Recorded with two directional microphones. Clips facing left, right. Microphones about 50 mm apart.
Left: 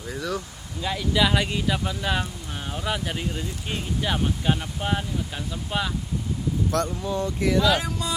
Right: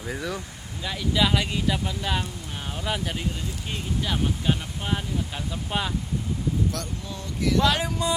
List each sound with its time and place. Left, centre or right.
0.0 s speech: centre
0.9 s speech: centre
5.5 s speech: centre
6.7 s speech: left
7.1 s speech: left
7.6 s speech: centre